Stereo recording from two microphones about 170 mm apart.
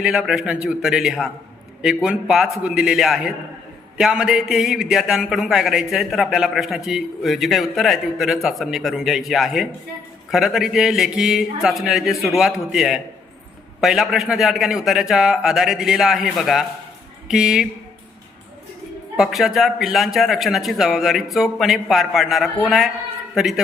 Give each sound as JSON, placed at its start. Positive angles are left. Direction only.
{"t": 0.0, "sound": "a man's voice", "side_deg": -5}
{"t": 19.1, "sound": "a man's voice", "side_deg": 0}